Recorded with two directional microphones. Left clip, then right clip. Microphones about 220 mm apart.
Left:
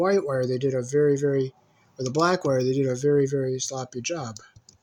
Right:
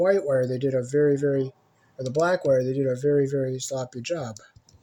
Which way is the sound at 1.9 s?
30° left (ahead or behind).